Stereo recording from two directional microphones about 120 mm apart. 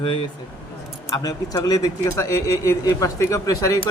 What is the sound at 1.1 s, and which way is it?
Speech, 30° left (ahead or behind).